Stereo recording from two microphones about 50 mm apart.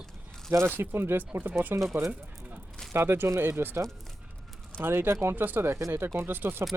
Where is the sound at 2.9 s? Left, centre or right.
Right.